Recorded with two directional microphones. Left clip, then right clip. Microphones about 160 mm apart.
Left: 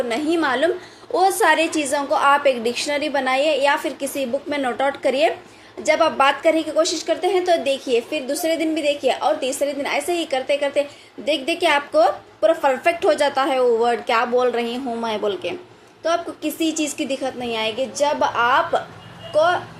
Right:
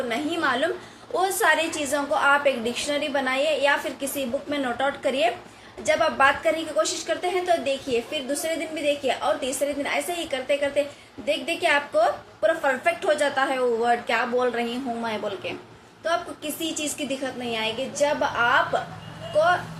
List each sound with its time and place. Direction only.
0.1 s a woman's voice: 40° left (ahead or behind)